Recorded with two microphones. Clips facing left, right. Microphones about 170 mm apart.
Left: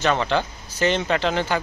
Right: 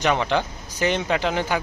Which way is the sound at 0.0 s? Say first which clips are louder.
Even; 15° right (ahead or behind).